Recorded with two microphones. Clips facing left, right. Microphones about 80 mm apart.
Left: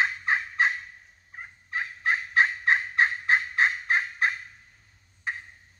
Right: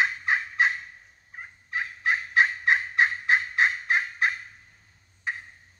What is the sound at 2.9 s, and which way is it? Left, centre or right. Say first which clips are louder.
Gobble: even; left.